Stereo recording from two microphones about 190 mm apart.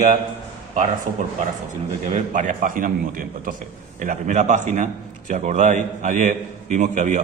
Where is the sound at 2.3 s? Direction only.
40° right (ahead or behind).